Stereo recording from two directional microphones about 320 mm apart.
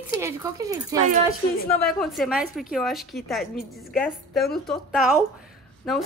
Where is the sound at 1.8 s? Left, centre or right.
Centre.